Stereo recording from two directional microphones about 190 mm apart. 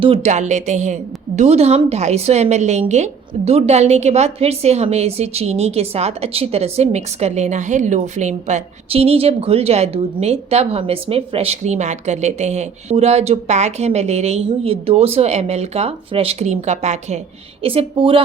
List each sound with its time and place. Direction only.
0.0 s a woman's voice: 35° right (ahead or behind)